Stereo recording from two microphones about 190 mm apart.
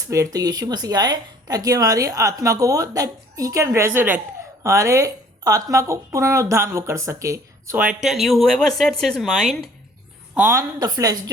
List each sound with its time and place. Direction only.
0.1 s speech: 20° right (ahead or behind); by 9.6 s centre (ahead or behind)
10.3 s speech: 15° right (ahead or behind)